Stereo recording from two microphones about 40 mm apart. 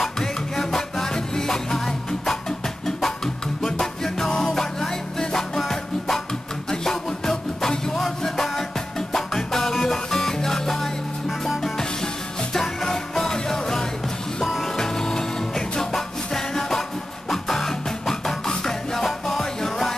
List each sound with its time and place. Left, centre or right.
0.0 s music: centre
3.6 s music: centre
14.8 s music: centre